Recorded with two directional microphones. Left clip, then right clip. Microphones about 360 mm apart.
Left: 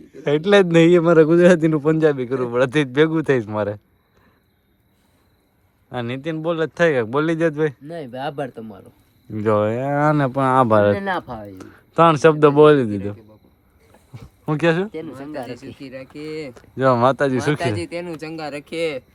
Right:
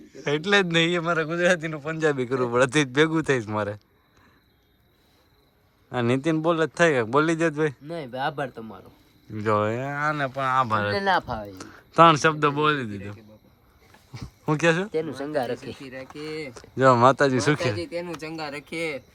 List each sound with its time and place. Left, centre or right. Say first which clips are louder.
0.0 s speech: left 7 dB; centre
2.0 s speech: left 4 dB; centre
5.9 s speech: right 2 dB; centre
10.9 s speech: right 1 dB; centre
14.9 s speech: right 4 dB; right
15.8 s speech: left 3 dB; centre